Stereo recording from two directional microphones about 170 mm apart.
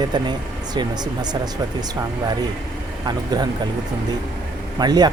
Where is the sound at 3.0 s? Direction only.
25° right (ahead or behind).